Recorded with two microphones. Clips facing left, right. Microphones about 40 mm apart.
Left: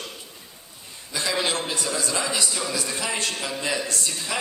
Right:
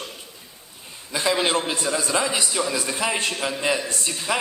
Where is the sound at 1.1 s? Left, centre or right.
Right.